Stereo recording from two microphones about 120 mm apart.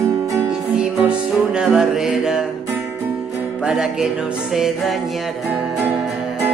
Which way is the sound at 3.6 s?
5° right (ahead or behind).